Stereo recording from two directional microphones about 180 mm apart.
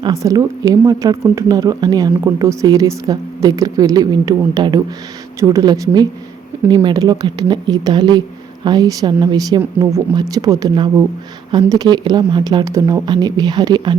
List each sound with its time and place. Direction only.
0.0 s speech: 20° right (ahead or behind)